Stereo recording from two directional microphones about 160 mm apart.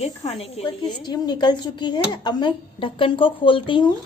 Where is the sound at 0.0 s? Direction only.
40° left (ahead or behind).